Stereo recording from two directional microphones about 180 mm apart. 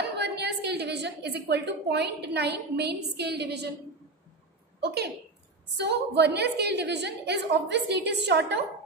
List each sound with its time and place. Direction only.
0.0 s a woman's voice: 65° right (ahead or behind)
4.7 s a woman's voice: 65° right (ahead or behind)